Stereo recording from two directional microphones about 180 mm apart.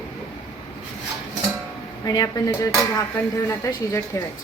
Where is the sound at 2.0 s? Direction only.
20° left (ahead or behind).